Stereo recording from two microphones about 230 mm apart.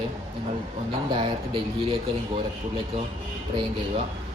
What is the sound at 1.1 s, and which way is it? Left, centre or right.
Speech, right.